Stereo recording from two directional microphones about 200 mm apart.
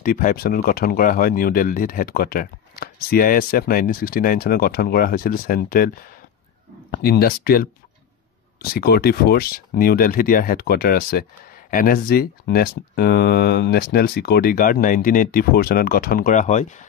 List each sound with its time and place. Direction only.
0.0 s speech: 45° left (ahead or behind)
6.9 s speech: 50° left (ahead or behind)